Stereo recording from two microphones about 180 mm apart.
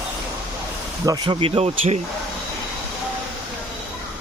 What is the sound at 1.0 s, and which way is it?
Speech, 20° right (ahead or behind).